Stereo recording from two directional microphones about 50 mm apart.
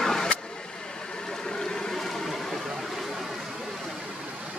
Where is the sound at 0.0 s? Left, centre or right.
Centre.